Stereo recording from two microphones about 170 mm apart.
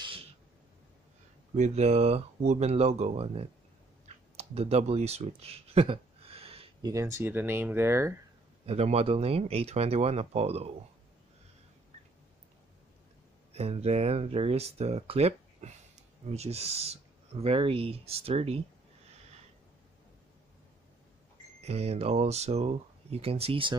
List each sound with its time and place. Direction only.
0.0 s a sound: 30° right (ahead or behind)
1.5 s speech: 40° right (ahead or behind)
4.0 s a sound: 40° right (ahead or behind)
6.9 s speech: 20° right (ahead or behind)
8.6 s speech: 35° right (ahead or behind)
13.5 s speech: 35° right (ahead or behind)
21.5 s speech: 40° right (ahead or behind)